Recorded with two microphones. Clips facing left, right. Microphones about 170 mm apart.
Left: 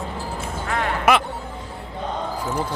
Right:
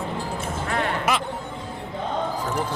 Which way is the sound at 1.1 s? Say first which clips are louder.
Left 8 dB; 65° left (ahead or behind).